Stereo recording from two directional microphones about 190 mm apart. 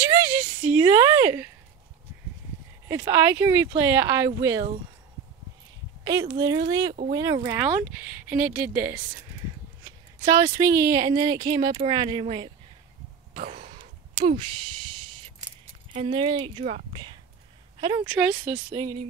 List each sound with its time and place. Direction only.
0.0 s speech: 10° right (ahead or behind)
2.9 s speech: 10° right (ahead or behind)
6.0 s speech: 20° right (ahead or behind)
13.3 s a sound: 40° right (ahead or behind)
14.3 s speech: 25° right (ahead or behind)